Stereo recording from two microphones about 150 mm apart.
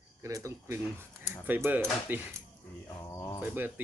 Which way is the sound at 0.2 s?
20° right (ahead or behind).